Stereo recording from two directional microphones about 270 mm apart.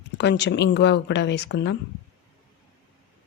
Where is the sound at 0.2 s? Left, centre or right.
Left.